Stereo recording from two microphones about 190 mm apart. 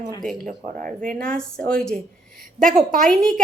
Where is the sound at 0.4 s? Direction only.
45° right (ahead or behind).